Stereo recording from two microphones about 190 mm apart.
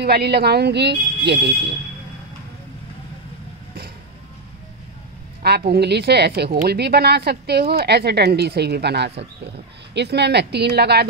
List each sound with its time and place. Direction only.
0.0 s a woman's voice: 55° right (ahead or behind)
5.4 s a woman's voice: 60° right (ahead or behind)